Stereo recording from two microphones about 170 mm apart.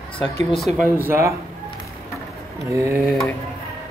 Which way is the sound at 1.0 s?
15° right (ahead or behind).